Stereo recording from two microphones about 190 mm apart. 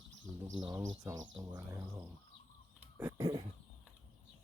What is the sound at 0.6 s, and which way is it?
Speech, 20° right (ahead or behind).